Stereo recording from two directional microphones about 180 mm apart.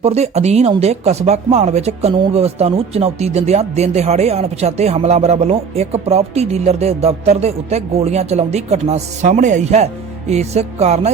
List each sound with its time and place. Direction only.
0.0 s speech: 35° right (ahead or behind)